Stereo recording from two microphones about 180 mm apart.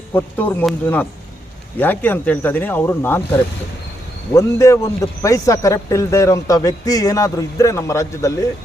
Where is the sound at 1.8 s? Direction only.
10° left (ahead or behind).